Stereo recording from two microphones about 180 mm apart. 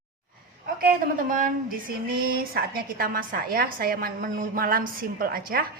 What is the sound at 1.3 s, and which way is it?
A woman's voice, 50° right (ahead or behind).